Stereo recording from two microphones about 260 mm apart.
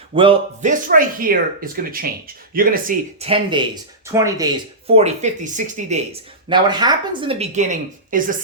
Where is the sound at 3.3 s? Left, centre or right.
Centre.